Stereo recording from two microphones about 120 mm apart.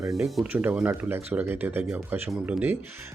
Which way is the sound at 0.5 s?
15° right (ahead or behind).